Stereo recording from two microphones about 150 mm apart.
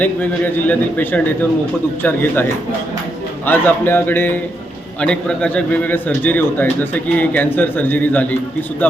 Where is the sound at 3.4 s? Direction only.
15° left (ahead or behind).